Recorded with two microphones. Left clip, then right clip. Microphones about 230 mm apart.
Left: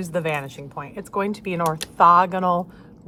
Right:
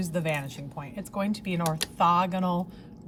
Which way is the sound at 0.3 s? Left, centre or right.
Left.